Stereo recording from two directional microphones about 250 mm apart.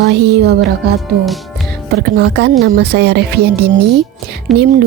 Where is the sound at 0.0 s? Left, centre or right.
Right.